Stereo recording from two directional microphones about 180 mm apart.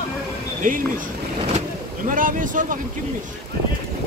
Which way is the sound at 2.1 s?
50° right (ahead or behind).